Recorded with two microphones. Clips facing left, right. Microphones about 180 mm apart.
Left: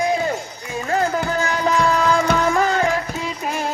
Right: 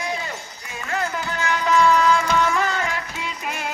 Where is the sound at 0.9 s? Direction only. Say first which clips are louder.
Left 6 dB; 40° left (ahead or behind).